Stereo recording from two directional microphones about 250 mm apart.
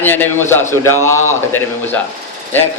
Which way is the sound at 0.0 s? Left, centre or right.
Centre.